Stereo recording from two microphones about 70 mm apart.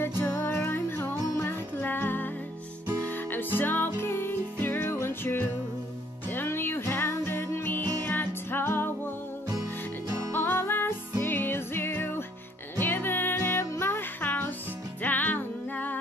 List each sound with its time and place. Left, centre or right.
0.2 s music: left
10.3 s music: left